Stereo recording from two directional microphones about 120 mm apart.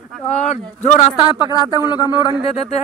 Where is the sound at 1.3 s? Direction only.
35° left (ahead or behind).